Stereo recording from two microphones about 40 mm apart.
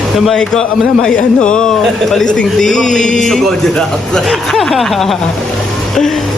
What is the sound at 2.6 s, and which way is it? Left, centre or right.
Speech, centre.